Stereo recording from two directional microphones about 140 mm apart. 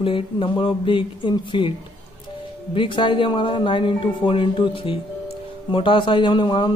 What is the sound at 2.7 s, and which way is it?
Speech, 35° left (ahead or behind).